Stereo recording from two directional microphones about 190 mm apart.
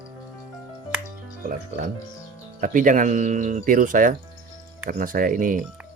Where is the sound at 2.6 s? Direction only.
45° right (ahead or behind).